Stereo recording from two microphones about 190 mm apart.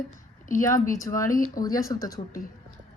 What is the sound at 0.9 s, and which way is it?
Speech, 15° left (ahead or behind).